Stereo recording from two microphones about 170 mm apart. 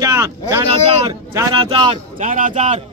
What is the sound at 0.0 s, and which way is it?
Speech, 15° right (ahead or behind).